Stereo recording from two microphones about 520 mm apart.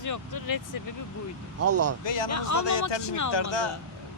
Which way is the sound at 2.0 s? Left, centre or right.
Left.